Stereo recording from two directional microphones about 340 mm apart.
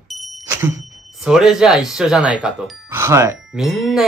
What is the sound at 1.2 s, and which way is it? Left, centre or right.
Speech, centre.